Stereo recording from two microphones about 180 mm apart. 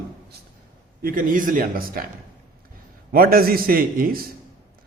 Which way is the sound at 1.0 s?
50° right (ahead or behind).